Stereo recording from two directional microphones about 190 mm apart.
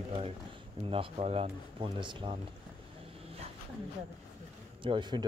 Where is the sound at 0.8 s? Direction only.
30° right (ahead or behind).